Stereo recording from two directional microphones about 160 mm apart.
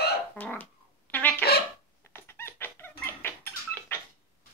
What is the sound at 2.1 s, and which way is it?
Squeak, 15° left (ahead or behind).